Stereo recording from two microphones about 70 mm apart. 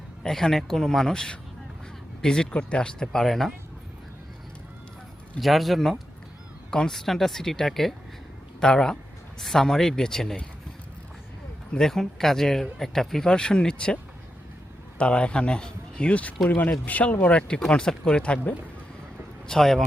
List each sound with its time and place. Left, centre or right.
0.2 s speech: centre
5.4 s speech: centre
11.7 s speech: centre